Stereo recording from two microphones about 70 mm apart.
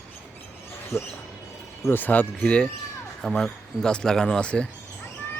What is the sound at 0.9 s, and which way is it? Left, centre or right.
Speech, left.